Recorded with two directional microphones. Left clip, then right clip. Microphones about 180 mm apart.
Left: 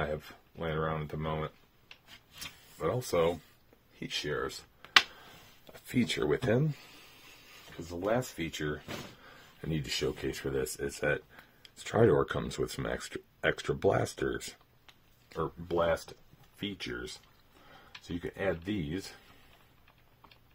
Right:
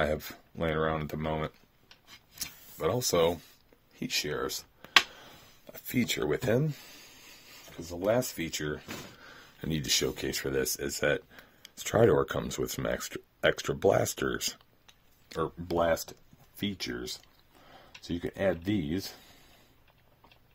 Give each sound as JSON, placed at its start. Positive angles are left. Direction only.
{"t": 0.0, "sound": "speech", "side_deg": -75}
{"t": 5.7, "sound": "speech", "side_deg": -40}
{"t": 8.0, "sound": "speech", "side_deg": -60}
{"t": 15.2, "sound": "speech", "side_deg": -60}